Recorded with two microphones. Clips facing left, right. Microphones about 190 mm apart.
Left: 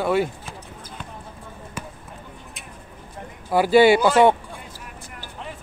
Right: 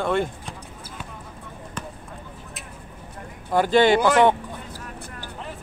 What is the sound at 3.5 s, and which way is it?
Speech, 10° left (ahead or behind).